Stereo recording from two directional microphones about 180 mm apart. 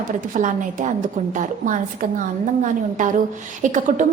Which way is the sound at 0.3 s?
45° right (ahead or behind).